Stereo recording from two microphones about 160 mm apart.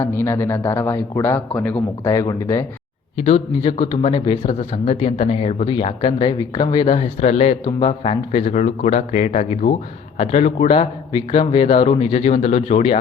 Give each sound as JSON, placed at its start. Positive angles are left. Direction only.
{"t": 0.0, "sound": "a man's voice", "side_deg": 15}
{"t": 3.2, "sound": "a man's voice", "side_deg": 40}
{"t": 5.6, "sound": "speech", "side_deg": 30}
{"t": 6.8, "sound": "a man's voice", "side_deg": 40}